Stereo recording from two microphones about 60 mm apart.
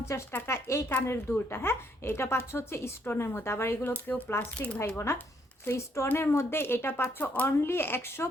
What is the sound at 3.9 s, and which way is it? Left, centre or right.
Speech, left.